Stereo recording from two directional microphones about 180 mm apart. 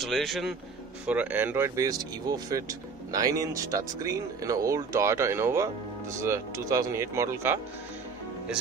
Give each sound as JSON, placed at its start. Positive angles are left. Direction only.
{"t": 0.0, "sound": "a man's voice", "side_deg": 0}